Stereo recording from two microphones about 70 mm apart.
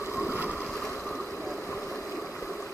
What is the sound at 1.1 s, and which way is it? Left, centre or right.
Vehicle, left.